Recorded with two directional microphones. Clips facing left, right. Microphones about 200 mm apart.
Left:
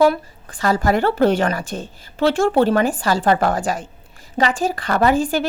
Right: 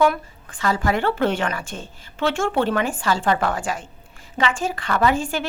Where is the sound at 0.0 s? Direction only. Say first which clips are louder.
Left 4 dB; 35° left (ahead or behind).